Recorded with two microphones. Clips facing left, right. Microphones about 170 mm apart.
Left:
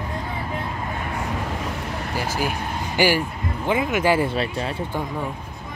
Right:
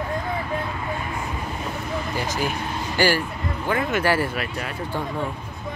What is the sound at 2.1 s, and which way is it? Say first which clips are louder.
Speech: left 3 dB; 10° left (ahead or behind).